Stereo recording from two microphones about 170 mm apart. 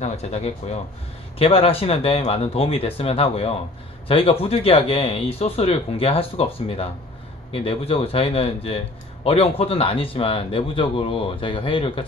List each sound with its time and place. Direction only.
0.0 s a man's voice: 40° left (ahead or behind)